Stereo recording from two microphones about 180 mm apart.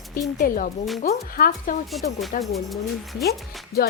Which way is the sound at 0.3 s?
50° left (ahead or behind).